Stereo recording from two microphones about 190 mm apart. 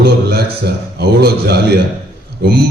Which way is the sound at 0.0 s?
55° right (ahead or behind).